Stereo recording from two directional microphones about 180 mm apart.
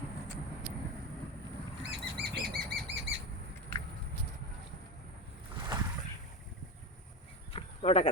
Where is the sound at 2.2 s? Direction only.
55° right (ahead or behind).